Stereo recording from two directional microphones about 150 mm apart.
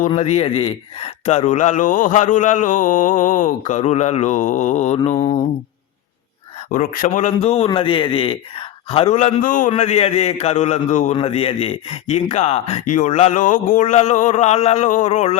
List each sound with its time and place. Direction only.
0.2 s a man's voice: 45° left (ahead or behind)
6.7 s a man's voice: 65° left (ahead or behind); by 15.4 s 50° left (ahead or behind)